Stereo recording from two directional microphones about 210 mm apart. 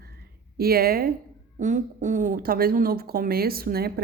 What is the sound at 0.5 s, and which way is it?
Speech, 45° right (ahead or behind).